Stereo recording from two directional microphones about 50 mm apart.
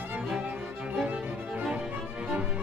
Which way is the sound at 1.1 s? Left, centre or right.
Centre.